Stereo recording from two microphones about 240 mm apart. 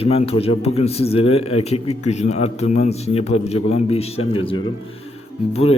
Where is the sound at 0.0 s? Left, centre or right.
Left.